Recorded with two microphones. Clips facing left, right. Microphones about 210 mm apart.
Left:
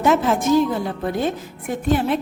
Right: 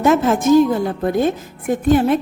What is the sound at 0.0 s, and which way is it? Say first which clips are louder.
A woman's voice: right 3 dB; 45° right (ahead or behind).